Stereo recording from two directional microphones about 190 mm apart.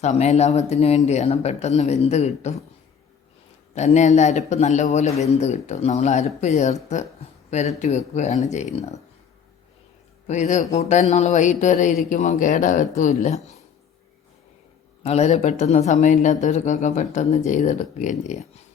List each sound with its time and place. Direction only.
0.0 s speech: 35° left (ahead or behind)
3.8 s speech: 35° left (ahead or behind)
7.8 s speech: 35° left (ahead or behind)
10.2 s speech: 40° left (ahead or behind)
15.0 s speech: 35° left (ahead or behind)